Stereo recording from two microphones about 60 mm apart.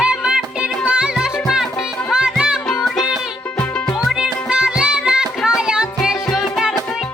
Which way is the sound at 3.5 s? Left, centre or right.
Centre.